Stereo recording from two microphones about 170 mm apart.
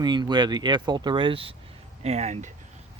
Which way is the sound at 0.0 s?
25° right (ahead or behind).